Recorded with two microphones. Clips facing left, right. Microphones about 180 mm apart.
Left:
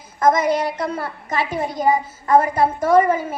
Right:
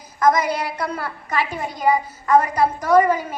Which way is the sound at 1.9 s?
25° left (ahead or behind).